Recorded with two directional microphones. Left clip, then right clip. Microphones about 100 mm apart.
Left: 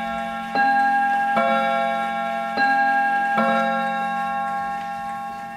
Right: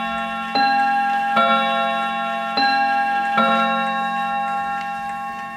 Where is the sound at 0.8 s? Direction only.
25° right (ahead or behind).